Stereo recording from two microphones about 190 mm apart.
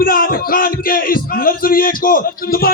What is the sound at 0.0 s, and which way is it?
Music, 50° left (ahead or behind).